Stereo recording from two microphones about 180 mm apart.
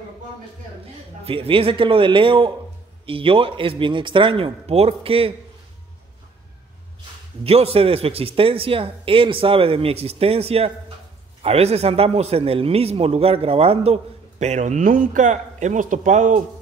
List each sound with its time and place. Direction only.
1.2 s a man's voice: 30° right (ahead or behind)
7.4 s a man's voice: 35° right (ahead or behind)